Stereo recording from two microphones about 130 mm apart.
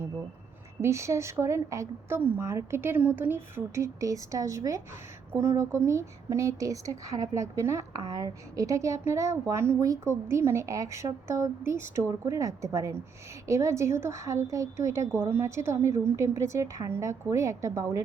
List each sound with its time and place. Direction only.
0.8 s a woman's voice: 20° right (ahead or behind)